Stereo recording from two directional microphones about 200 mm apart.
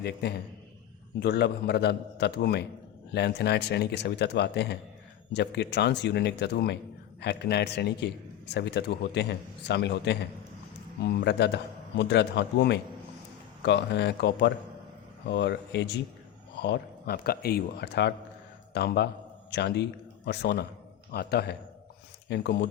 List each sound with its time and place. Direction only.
0.0 s a man's voice: 55° left (ahead or behind)